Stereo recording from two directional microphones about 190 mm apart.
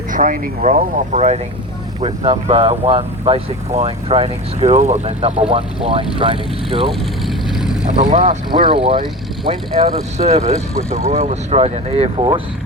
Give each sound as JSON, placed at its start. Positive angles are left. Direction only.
{"t": 0.1, "sound": "speech", "side_deg": -45}
{"t": 7.3, "sound": "vehicle", "side_deg": 0}
{"t": 8.1, "sound": "speech", "side_deg": -40}
{"t": 8.5, "sound": "speech", "side_deg": -25}